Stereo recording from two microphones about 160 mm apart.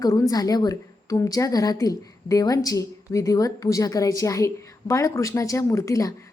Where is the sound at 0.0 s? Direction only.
20° left (ahead or behind).